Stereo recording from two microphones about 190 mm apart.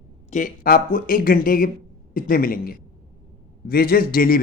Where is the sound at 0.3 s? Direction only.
45° left (ahead or behind).